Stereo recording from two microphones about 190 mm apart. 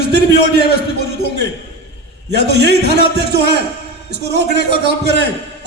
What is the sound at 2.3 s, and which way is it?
A man's voice, 60° right (ahead or behind).